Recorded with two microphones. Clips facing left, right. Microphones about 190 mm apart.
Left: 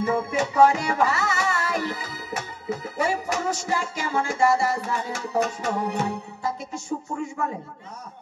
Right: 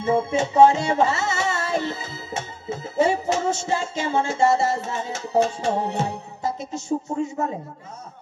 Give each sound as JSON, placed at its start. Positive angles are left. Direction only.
{"t": 0.0, "sound": "music", "side_deg": -25}